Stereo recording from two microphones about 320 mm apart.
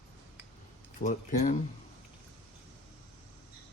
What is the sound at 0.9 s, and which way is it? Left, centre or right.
Speech, left.